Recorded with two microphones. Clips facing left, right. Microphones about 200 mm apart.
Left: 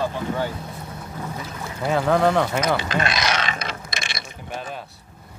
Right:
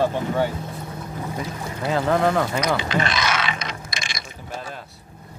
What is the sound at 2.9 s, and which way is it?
Speech, 40° left (ahead or behind).